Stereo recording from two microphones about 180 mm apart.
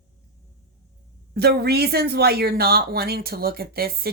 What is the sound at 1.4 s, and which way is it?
A woman's voice, 60° right (ahead or behind).